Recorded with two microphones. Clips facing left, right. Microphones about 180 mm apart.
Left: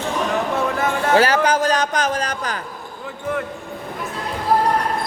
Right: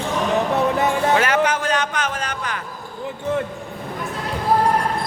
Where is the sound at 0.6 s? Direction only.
20° right (ahead or behind).